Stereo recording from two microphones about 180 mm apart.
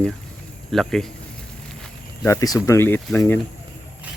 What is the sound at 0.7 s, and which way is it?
Speech, centre (ahead or behind).